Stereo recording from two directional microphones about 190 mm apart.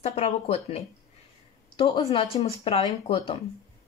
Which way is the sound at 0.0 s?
30° left (ahead or behind).